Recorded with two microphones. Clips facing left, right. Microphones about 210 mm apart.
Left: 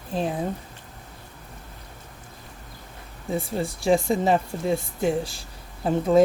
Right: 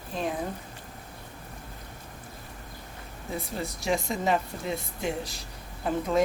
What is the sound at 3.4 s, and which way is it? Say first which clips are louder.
A woman's voice: left 6 dB; 30° left (ahead or behind).